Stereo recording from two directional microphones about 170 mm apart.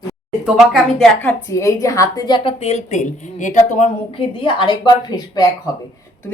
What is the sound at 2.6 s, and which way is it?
Speech, 40° left (ahead or behind).